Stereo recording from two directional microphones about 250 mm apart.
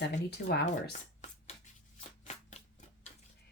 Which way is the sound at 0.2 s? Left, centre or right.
Left.